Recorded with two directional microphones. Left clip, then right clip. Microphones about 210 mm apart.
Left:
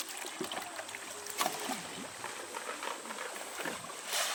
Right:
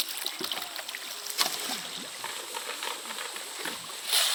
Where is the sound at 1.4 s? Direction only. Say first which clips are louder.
Right 5 dB; 5° left (ahead or behind).